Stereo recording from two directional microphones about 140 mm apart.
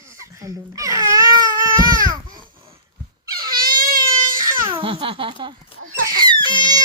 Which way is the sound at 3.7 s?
90° right.